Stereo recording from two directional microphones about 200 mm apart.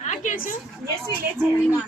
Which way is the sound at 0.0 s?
35° left (ahead or behind).